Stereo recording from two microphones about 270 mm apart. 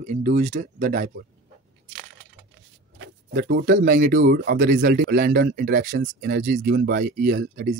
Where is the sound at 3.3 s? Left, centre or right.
Right.